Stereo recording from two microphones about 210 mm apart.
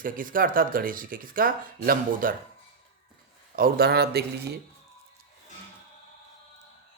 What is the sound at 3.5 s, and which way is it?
Speech, 45° right (ahead or behind).